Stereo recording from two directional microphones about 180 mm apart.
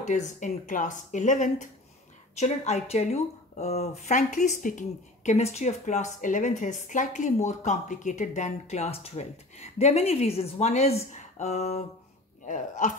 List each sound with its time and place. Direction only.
0.0 s speech: 45° left (ahead or behind)